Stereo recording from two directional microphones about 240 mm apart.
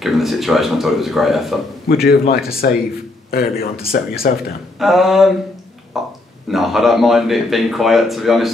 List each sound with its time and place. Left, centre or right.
0.0 s speech: centre
2.0 s speech: left
4.7 s speech: centre